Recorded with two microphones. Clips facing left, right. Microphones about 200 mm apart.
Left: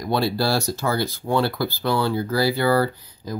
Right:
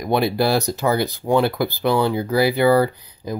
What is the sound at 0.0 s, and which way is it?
Speech, 20° right (ahead or behind).